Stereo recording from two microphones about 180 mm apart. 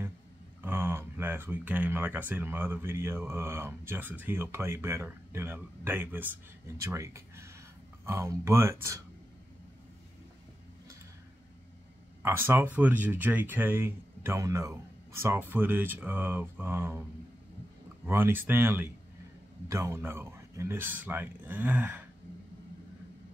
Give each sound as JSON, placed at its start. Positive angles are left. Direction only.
{"t": 0.6, "sound": "speech", "side_deg": -10}
{"t": 12.2, "sound": "speech", "side_deg": -15}
{"t": 18.0, "sound": "speech", "side_deg": -10}